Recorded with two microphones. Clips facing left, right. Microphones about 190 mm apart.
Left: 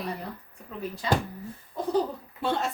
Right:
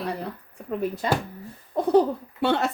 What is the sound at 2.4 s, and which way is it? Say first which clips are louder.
Speech: right 5 dB; 70° right (ahead or behind).